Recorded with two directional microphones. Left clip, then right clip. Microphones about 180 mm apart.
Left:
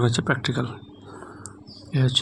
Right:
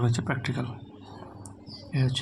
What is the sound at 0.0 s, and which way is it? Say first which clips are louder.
Speech: left 7 dB; 30° left (ahead or behind).